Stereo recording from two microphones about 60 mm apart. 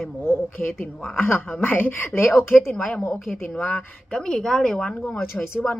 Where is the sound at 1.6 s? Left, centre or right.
Left.